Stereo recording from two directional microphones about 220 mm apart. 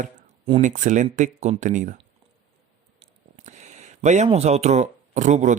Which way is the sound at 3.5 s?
30° right (ahead or behind).